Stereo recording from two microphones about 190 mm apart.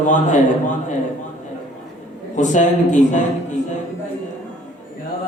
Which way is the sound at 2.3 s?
40° left (ahead or behind).